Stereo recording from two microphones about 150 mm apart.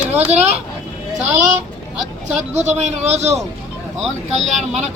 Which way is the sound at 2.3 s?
50° right (ahead or behind).